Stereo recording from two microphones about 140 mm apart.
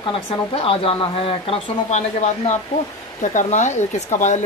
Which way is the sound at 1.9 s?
55° left (ahead or behind).